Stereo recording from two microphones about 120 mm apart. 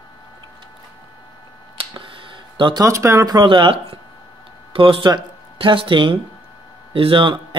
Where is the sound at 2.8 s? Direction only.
25° right (ahead or behind).